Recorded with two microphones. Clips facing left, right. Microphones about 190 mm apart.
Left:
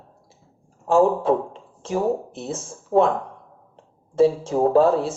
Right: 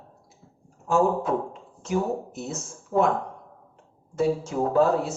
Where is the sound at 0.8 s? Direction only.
30° left (ahead or behind).